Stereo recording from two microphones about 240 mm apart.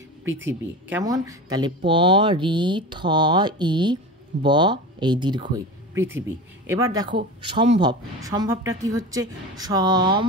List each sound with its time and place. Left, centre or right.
0.3 s speech: right
0.8 s speech: centre